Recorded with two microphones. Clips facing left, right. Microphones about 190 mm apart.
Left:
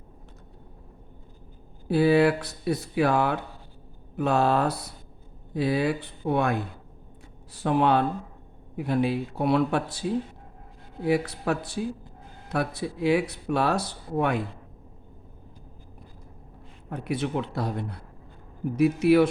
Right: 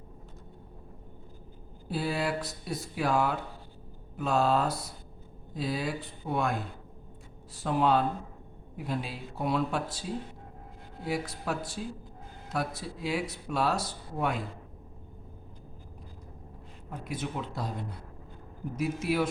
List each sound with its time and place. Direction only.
1.9 s speech: 65° left (ahead or behind)
11.0 s speech: 65° left (ahead or behind)
16.9 s speech: 65° left (ahead or behind)